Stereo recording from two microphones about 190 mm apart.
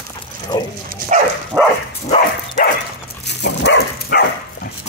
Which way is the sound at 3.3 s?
65° left (ahead or behind).